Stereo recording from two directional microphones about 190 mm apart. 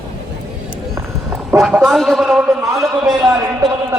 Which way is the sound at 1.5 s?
5° right (ahead or behind).